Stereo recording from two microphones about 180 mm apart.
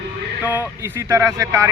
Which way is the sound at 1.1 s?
15° right (ahead or behind).